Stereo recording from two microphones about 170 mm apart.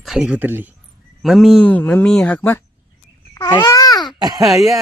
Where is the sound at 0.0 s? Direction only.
5° right (ahead or behind).